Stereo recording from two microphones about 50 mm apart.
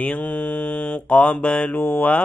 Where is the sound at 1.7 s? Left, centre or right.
Left.